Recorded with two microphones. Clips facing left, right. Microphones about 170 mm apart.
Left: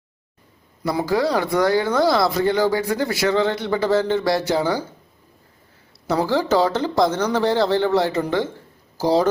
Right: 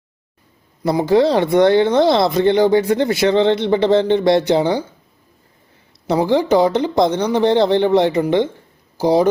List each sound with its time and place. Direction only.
0.9 s speech: 25° right (ahead or behind)
6.1 s speech: 20° right (ahead or behind)